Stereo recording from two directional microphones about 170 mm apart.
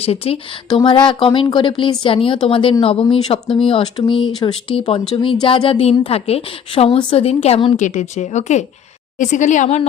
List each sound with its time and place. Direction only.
0.0 s a woman's voice: 35° left (ahead or behind)
7.8 s speech: 45° left (ahead or behind)